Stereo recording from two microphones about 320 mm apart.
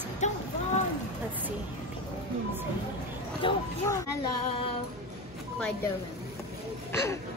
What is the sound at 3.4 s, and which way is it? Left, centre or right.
Speech, centre.